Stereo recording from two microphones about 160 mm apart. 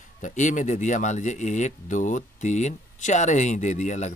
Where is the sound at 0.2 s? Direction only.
50° left (ahead or behind).